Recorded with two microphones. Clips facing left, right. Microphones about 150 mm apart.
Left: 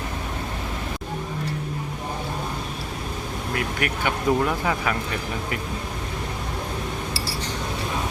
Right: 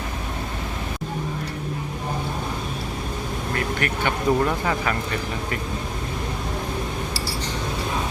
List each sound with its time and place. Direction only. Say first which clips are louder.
3.5 s speech: right 1 dB; 10° left (ahead or behind)